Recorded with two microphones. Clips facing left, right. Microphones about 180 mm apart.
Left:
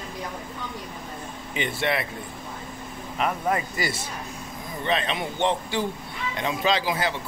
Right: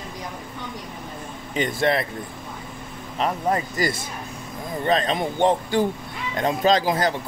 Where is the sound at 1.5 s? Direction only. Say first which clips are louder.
Right 5 dB; 40° right (ahead or behind).